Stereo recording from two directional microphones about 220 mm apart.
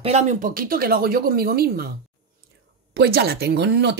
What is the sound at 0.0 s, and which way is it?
Speech, 30° right (ahead or behind).